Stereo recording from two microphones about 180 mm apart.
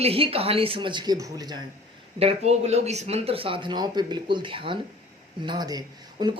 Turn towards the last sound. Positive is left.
turn(degrees=-20)  # may be behind; listen again after turning